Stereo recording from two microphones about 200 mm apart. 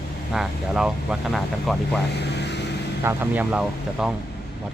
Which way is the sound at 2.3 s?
60° left (ahead or behind).